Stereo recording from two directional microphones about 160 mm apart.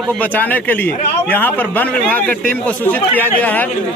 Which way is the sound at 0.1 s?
10° left (ahead or behind).